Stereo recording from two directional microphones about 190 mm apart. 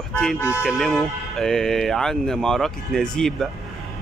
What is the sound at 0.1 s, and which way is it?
Speech, 5° left (ahead or behind).